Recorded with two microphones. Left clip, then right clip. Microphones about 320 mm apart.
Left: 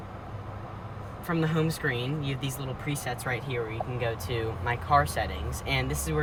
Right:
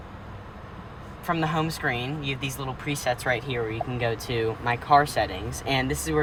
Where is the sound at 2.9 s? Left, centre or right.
Right.